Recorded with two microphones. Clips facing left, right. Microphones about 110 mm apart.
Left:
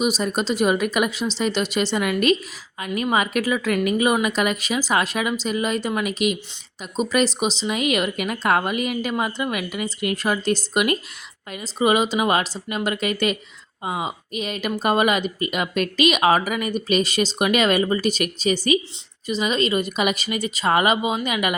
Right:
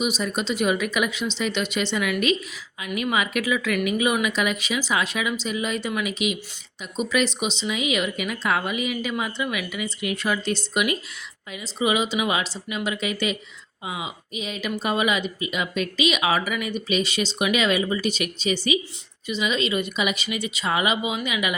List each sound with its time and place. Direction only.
0.0 s speech: 40° left (ahead or behind)
7.8 s speech: 50° left (ahead or behind)